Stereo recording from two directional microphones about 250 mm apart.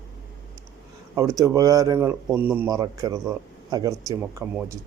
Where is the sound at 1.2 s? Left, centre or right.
Centre.